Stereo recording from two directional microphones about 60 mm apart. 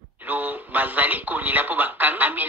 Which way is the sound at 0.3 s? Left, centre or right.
Right.